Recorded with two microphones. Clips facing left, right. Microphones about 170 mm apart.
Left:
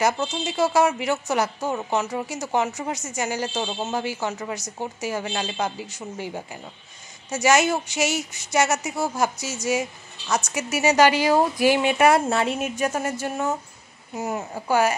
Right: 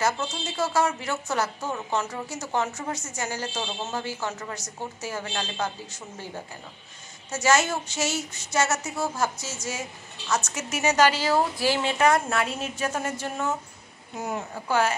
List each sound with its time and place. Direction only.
0.0 s speech: 15° left (ahead or behind)
12.3 s a woman's voice: 25° left (ahead or behind)
12.5 s speech: 10° left (ahead or behind)